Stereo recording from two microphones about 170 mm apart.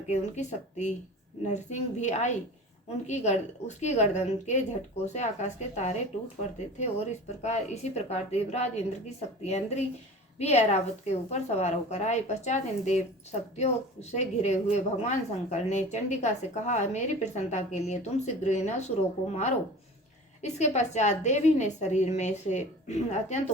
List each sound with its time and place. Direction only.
0.1 s a woman's voice: 45° left (ahead or behind)